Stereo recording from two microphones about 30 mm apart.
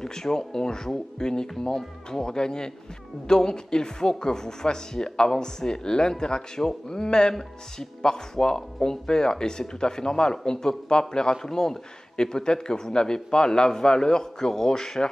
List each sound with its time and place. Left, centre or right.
0.0 s speech: centre